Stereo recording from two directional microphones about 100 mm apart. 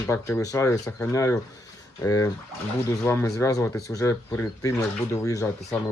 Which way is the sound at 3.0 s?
25° left (ahead or behind).